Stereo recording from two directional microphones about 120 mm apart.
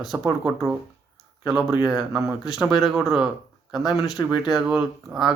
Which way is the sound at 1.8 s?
5° right (ahead or behind).